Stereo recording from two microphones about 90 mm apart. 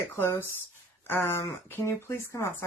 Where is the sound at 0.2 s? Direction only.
25° left (ahead or behind).